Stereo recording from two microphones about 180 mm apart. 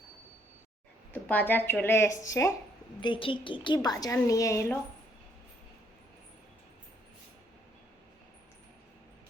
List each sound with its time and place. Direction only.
1.1 s speech: 10° left (ahead or behind)
3.0 s a woman's voice: 30° left (ahead or behind)